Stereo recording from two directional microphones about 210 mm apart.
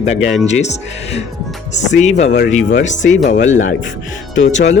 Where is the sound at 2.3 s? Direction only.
55° left (ahead or behind).